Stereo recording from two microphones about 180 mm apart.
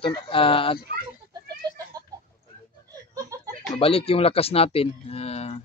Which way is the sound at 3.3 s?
20° right (ahead or behind).